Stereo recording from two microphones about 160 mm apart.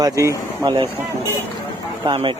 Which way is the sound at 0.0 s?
20° right (ahead or behind).